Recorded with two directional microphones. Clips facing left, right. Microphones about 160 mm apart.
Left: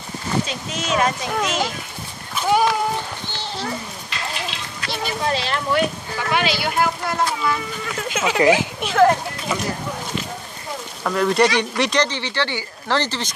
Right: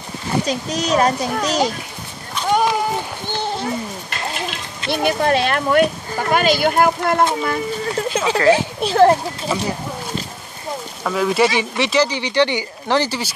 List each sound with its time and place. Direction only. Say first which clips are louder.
0.5 s speech: right 5 dB; 40° right (ahead or behind)
2.4 s a sound: even; 5° left (ahead or behind)
3.3 s a sound: right 7 dB; 50° right (ahead or behind)
5.0 s speech: right 7 dB; 60° right (ahead or behind)
7.4 s speech: right 3 dB; 40° right (ahead or behind)
11.1 s speech: right 1 dB; 5° right (ahead or behind)